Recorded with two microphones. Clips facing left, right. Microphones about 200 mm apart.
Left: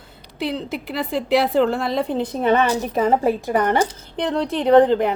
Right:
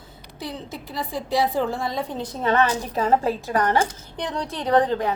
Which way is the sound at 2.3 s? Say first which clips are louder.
Left 2 dB; 20° left (ahead or behind).